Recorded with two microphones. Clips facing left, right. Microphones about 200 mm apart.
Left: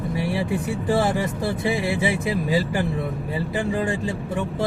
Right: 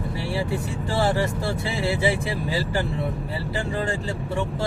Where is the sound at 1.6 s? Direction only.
15° left (ahead or behind).